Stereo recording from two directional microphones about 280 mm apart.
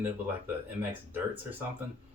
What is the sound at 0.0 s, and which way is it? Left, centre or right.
Speech, centre.